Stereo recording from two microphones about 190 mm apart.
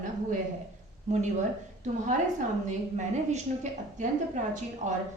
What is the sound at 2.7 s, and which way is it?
A woman's voice, 40° right (ahead or behind).